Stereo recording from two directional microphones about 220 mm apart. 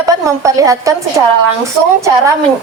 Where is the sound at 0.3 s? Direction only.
15° right (ahead or behind).